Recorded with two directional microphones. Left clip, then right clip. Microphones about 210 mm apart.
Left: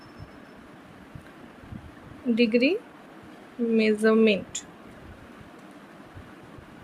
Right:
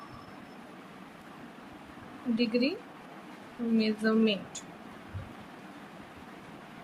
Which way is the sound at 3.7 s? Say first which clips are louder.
Left 8 dB; 30° left (ahead or behind).